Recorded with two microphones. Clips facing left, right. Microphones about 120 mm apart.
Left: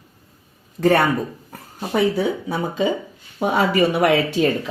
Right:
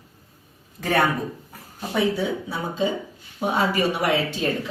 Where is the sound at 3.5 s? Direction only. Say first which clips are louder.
Left 5 dB; 70° left (ahead or behind).